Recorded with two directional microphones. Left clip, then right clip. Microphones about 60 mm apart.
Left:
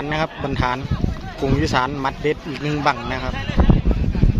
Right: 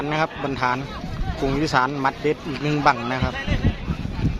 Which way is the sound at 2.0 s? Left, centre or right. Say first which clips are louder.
Even; centre.